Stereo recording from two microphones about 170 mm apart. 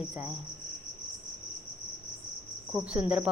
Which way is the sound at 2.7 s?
5° right (ahead or behind).